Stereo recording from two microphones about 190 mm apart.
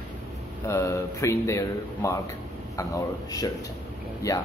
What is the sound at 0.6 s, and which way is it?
Speech, 15° left (ahead or behind).